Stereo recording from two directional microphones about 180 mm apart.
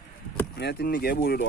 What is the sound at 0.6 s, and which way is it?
Speech, 60° left (ahead or behind).